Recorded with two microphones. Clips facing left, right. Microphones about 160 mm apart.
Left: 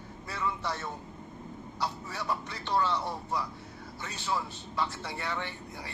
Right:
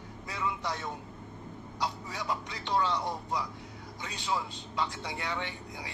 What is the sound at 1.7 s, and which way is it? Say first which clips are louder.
A man's voice: even; 15° right (ahead or behind).